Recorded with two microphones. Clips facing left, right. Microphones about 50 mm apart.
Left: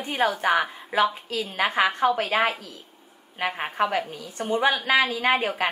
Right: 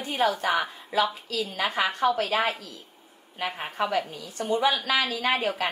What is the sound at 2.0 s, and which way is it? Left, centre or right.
Speech, centre.